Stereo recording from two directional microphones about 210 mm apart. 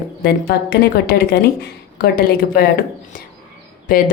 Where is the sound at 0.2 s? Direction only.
45° left (ahead or behind).